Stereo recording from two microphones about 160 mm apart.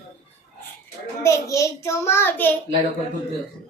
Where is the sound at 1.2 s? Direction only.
20° left (ahead or behind).